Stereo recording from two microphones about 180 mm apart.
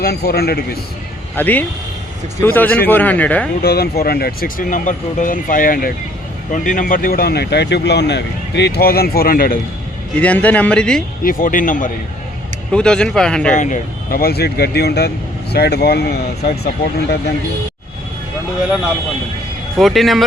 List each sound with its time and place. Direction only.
0.0 s speech: 60° left (ahead or behind)
1.4 s a man's voice: 10° left (ahead or behind)
3.6 s speech: 60° left (ahead or behind)
10.2 s a man's voice: 10° left (ahead or behind)
11.2 s speech: 50° left (ahead or behind)
12.7 s speech: 5° left (ahead or behind)
13.6 s speech: 50° left (ahead or behind)
19.8 s speech: centre (ahead or behind)